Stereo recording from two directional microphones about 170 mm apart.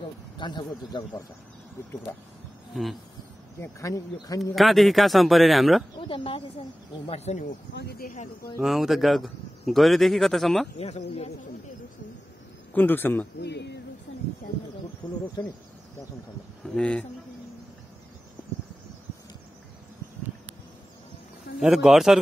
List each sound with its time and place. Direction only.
0.4 s speech: 25° left (ahead or behind)
2.7 s a man's voice: centre (ahead or behind)
3.5 s speech: 15° left (ahead or behind)
4.6 s a man's voice: centre (ahead or behind)
5.9 s speech: 30° left (ahead or behind)
7.7 s speech: 70° left (ahead or behind)
8.1 s speech: 50° left (ahead or behind)
8.5 s a man's voice: centre (ahead or behind)
10.8 s speech: 40° left (ahead or behind)
12.7 s speech: 10° left (ahead or behind)
13.4 s a sound: 85° left
15.0 s speech: 5° left (ahead or behind)
16.7 s a man's voice: 5° left (ahead or behind)
21.5 s a man's voice: 5° right (ahead or behind)